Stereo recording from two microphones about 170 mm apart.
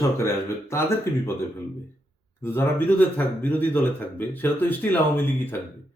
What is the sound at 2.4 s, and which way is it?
Speech, 15° left (ahead or behind).